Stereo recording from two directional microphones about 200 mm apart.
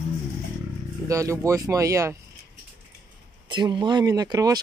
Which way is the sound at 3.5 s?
20° right (ahead or behind).